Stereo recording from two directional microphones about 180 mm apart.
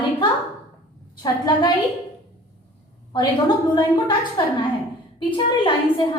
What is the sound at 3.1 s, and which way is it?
A woman's voice, 25° left (ahead or behind).